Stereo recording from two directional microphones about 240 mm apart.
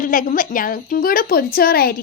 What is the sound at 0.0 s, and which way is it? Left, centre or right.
A child's voice, left.